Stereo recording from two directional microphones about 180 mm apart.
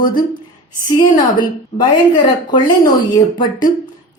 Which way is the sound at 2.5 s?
25° left (ahead or behind).